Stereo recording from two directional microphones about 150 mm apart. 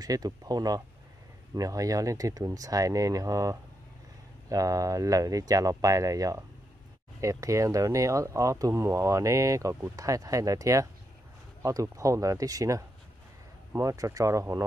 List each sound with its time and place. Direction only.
0.0 s speech: 25° right (ahead or behind)